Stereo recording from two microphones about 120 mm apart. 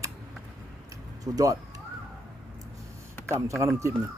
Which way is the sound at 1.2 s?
30° right (ahead or behind).